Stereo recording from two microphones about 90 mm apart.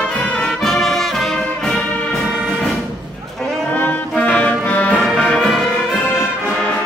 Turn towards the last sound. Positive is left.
turn(degrees=5)  # may be behind; listen again after turning